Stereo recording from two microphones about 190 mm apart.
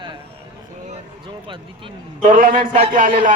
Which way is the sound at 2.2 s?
45° right (ahead or behind).